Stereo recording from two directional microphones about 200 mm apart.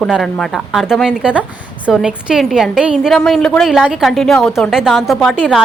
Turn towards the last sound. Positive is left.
turn(degrees=0)  # may be behind; listen again after turning